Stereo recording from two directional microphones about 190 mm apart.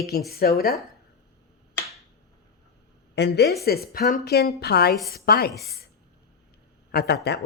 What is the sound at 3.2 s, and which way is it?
A woman's voice, 60° left (ahead or behind).